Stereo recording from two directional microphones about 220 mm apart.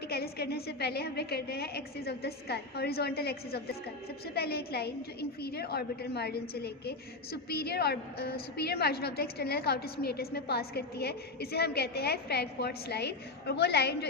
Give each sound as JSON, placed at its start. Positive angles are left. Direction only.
{"t": 0.1, "sound": "a woman's voice", "side_deg": 45}